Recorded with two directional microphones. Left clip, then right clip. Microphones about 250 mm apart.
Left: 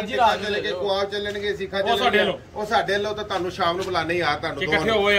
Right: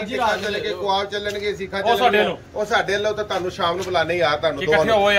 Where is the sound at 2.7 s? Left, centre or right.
Centre.